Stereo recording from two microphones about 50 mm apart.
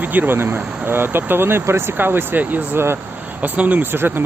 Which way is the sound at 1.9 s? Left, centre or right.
Right.